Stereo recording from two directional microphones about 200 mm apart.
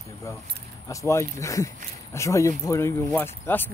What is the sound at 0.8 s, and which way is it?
Speech, 15° left (ahead or behind).